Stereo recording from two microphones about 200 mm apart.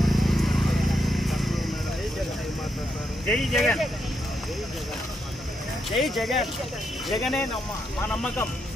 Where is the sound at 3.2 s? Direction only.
Centre (ahead or behind).